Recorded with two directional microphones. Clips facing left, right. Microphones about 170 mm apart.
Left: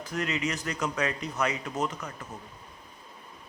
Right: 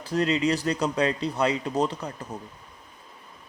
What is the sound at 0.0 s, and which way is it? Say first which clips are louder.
Speech: right 7 dB; 35° right (ahead or behind).